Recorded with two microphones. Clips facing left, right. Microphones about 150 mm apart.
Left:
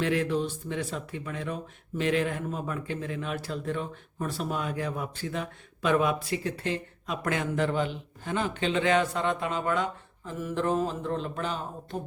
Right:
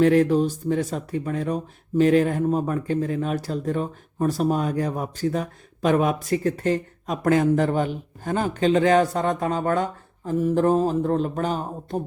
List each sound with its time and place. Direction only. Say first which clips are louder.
0.0 s speech: right 9 dB; 40° right (ahead or behind)